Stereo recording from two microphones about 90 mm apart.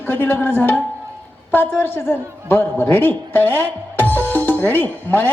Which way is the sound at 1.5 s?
25° left (ahead or behind).